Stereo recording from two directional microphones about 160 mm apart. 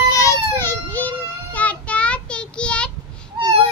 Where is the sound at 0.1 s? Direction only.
20° left (ahead or behind).